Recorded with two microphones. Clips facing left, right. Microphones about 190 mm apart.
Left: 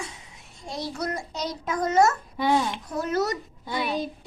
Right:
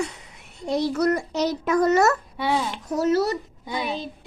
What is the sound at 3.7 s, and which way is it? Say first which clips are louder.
Speech: left 1 dB; 20° right (ahead or behind).